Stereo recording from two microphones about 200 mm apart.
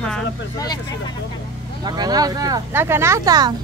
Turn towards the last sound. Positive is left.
turn(degrees=-20)  # may be behind; listen again after turning